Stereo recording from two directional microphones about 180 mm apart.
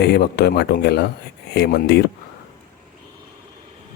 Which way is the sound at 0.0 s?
65° left (ahead or behind).